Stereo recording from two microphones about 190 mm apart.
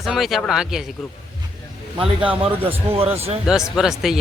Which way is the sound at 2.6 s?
30° right (ahead or behind).